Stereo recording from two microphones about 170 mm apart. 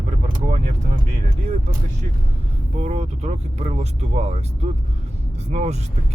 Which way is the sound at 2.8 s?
40° right (ahead or behind).